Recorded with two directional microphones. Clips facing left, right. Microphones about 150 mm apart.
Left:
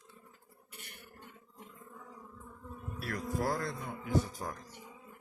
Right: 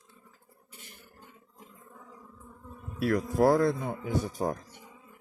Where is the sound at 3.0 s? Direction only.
50° right (ahead or behind).